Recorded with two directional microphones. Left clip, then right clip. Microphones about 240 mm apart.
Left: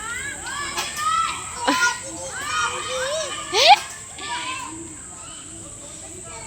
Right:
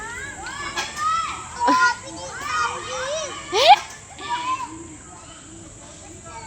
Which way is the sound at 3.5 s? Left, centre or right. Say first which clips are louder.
Even; centre.